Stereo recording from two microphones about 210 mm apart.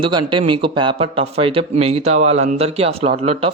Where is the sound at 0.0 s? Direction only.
20° right (ahead or behind).